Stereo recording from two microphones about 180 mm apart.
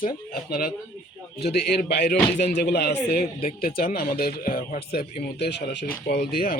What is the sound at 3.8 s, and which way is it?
Speech, 55° left (ahead or behind).